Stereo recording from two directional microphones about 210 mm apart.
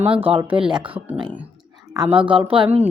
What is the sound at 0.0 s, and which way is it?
Speech, 25° right (ahead or behind).